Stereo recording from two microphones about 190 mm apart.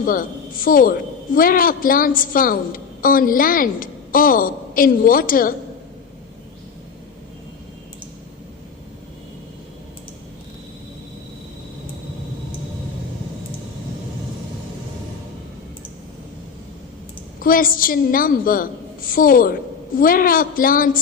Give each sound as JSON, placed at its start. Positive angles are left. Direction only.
{"t": 0.0, "sound": "a woman's voice", "side_deg": 50}
{"t": 17.4, "sound": "a woman's voice", "side_deg": 50}